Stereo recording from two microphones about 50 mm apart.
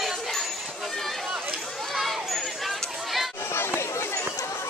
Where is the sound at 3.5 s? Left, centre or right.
Left.